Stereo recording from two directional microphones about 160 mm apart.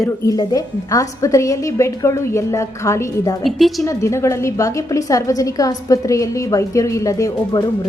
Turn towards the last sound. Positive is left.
turn(degrees=20)  # may be behind; listen again after turning